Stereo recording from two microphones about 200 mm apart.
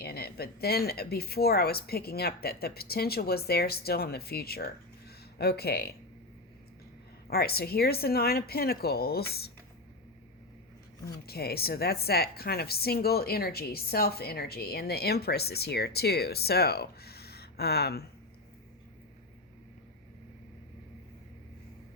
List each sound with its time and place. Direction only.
0.0 s a woman's voice: 50° left (ahead or behind)
7.3 s a woman's voice: 50° left (ahead or behind)
11.3 s a woman's voice: 50° left (ahead or behind)